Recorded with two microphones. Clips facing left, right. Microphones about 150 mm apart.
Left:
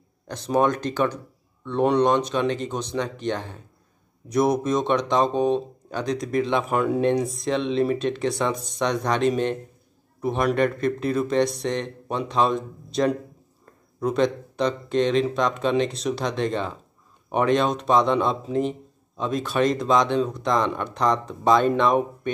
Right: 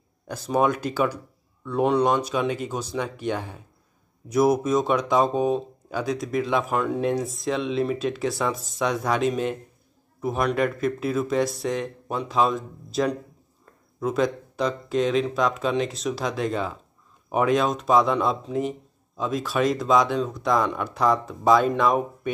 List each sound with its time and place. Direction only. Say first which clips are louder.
0.3 s speech: left 1 dB; 5° right (ahead or behind)